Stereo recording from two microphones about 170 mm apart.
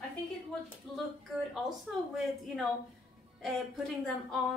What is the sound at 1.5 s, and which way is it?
Speech, centre (ahead or behind).